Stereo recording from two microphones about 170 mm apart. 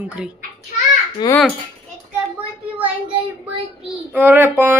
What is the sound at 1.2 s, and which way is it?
Speech, 25° left (ahead or behind).